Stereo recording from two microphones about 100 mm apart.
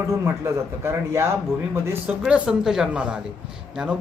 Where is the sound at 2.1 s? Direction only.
10° right (ahead or behind).